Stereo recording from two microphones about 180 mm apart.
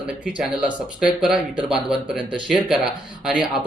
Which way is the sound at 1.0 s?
5° right (ahead or behind).